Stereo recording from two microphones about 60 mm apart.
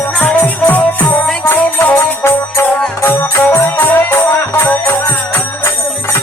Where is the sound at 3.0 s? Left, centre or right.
Left.